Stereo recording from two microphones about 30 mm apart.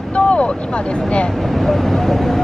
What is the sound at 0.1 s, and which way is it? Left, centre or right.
Boat, left.